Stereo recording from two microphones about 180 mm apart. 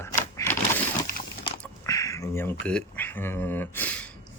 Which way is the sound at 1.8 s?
20° left (ahead or behind).